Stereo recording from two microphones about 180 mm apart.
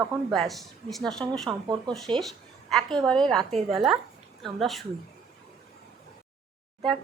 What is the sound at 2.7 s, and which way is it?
A woman's voice, 5° left (ahead or behind).